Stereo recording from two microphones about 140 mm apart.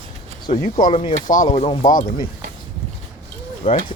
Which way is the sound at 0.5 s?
65° left (ahead or behind).